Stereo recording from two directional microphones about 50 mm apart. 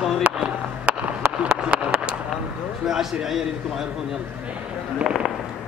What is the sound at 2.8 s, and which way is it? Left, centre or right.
Speech, centre.